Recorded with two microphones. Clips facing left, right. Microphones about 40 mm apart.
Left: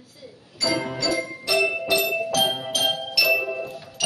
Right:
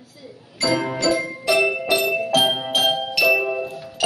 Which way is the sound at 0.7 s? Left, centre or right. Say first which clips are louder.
Right 4 dB; centre.